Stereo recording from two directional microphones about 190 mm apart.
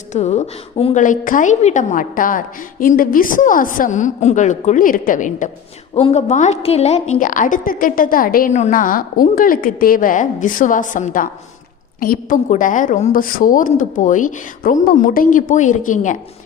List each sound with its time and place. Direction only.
0.1 s a woman's voice: 35° left (ahead or behind)
1.0 s a woman's voice: 45° left (ahead or behind)
5.9 s a woman's voice: 30° left (ahead or behind)